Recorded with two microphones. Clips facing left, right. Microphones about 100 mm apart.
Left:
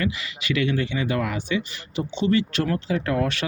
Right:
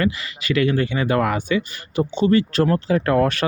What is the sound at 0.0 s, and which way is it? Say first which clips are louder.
Speech: right 5 dB; 40° right (ahead or behind).